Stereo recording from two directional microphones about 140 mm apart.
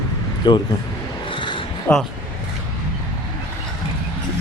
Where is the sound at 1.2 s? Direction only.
35° left (ahead or behind).